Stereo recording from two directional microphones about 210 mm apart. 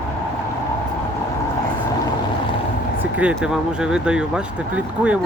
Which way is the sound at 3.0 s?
5° right (ahead or behind).